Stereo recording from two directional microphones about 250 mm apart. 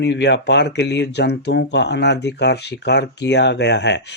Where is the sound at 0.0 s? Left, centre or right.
Left.